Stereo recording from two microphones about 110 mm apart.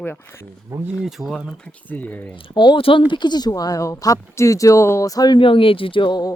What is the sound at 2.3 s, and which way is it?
Speech, 50° left (ahead or behind).